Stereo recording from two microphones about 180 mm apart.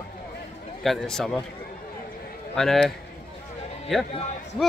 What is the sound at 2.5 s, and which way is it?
Speech, centre (ahead or behind).